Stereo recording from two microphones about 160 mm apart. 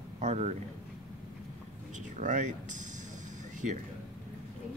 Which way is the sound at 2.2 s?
50° right (ahead or behind).